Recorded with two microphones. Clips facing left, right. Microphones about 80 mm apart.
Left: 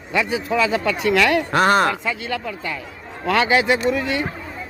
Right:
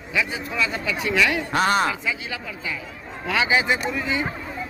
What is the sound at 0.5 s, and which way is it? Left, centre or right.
Speech, left.